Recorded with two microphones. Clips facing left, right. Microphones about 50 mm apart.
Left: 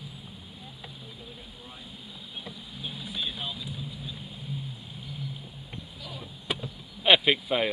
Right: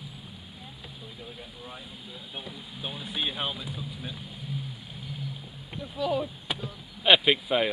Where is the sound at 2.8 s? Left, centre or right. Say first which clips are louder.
Right 2 dB; right.